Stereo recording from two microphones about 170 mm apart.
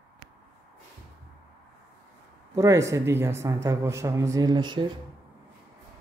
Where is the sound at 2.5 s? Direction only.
20° right (ahead or behind).